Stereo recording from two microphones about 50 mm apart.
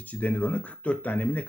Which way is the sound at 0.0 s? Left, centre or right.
Left.